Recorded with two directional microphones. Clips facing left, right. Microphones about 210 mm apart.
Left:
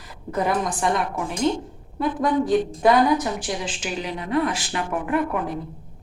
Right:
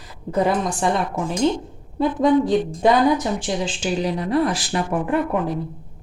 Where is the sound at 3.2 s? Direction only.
25° right (ahead or behind).